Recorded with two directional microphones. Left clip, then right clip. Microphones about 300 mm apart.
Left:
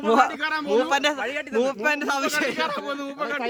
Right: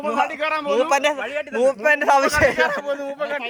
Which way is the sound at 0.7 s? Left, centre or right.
Centre.